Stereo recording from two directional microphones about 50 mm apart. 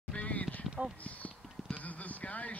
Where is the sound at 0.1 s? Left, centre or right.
Left.